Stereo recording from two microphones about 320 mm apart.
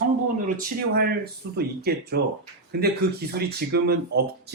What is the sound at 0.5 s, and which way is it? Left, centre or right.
Speech, right.